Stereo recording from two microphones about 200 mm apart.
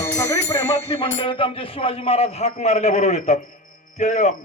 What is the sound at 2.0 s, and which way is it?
A man's voice, 30° left (ahead or behind).